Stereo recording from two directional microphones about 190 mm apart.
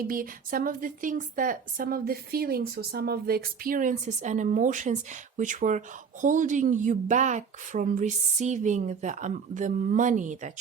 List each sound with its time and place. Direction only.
0.0 s a woman's voice: 50° right (ahead or behind)